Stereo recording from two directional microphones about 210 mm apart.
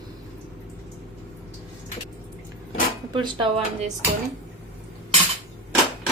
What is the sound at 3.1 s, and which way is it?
Speech, 20° right (ahead or behind).